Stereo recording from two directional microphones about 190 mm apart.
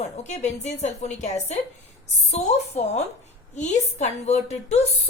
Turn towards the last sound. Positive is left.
turn(degrees=35)  # may be behind; listen again after turning